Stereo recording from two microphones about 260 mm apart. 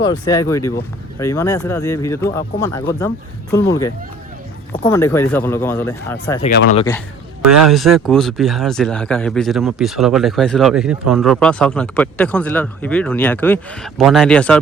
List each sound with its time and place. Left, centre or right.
0.0 s speech: centre
6.4 s speech: left
7.6 s speech: centre